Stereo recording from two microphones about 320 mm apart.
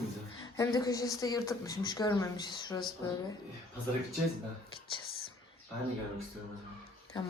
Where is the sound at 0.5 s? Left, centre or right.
Centre.